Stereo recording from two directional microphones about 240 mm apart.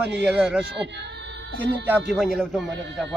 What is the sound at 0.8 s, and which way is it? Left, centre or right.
Speech, right.